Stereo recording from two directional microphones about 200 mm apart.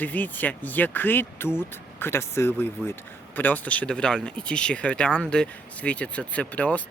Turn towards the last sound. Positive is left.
turn(degrees=5)  # may be behind; listen again after turning